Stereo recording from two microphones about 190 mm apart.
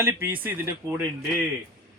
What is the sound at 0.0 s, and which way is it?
A man's voice, 10° right (ahead or behind).